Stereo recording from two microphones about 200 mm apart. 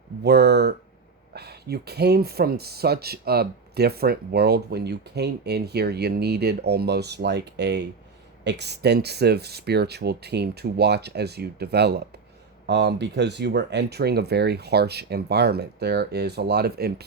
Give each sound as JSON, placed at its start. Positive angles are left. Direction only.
{"t": 0.2, "sound": "speech", "side_deg": -55}